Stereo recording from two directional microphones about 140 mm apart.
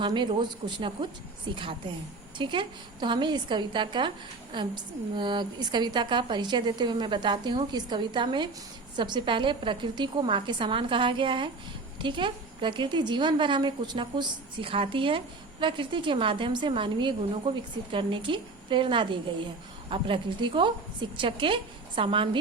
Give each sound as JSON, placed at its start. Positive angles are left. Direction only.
{"t": 0.0, "sound": "a woman's voice", "side_deg": -35}